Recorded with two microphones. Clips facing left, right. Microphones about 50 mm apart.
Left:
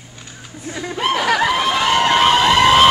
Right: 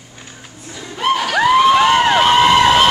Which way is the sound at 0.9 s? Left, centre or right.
Centre.